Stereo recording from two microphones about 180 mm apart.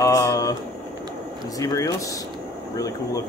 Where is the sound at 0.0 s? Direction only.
20° left (ahead or behind).